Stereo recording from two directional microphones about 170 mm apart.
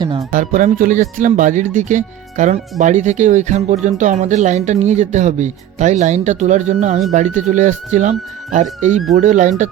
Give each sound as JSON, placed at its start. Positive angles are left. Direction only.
{"t": 0.3, "sound": "speech", "side_deg": -50}
{"t": 9.1, "sound": "speech", "side_deg": -45}